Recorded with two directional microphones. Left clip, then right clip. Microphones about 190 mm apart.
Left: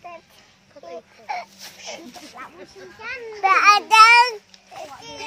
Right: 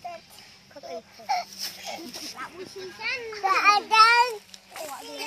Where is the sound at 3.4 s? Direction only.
60° left (ahead or behind); by 4.4 s 40° left (ahead or behind).